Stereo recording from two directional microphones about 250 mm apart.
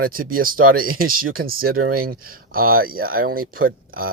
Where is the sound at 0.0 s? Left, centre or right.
Right.